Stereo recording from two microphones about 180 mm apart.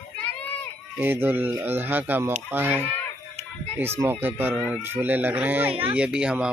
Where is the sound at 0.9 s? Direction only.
10° right (ahead or behind).